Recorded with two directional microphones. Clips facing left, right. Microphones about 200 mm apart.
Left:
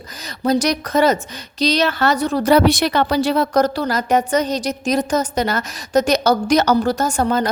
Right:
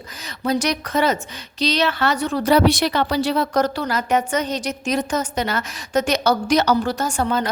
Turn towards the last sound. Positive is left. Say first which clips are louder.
# left 3 dB
turn(degrees=40)  # may be behind; listen again after turning